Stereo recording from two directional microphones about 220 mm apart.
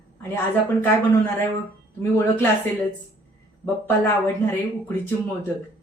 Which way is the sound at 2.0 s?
10° left (ahead or behind).